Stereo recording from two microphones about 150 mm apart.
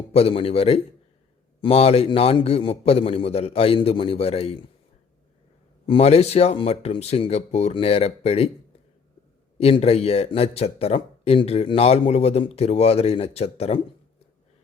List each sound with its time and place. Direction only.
0.1 s a man's voice: 40° left (ahead or behind)
5.8 s a man's voice: 40° left (ahead or behind)
9.6 s a man's voice: 40° left (ahead or behind)